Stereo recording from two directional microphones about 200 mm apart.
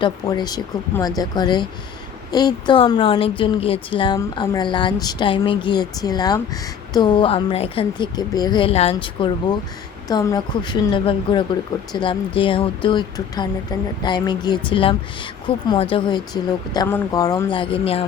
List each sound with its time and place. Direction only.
0.0 s speech: 20° left (ahead or behind)